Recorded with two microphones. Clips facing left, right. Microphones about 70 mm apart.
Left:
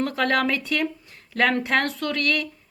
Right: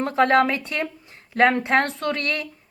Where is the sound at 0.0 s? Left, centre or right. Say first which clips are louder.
Right 4 dB; right.